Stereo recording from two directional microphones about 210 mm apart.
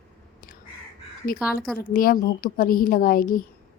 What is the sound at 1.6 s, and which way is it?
Speech, 5° left (ahead or behind).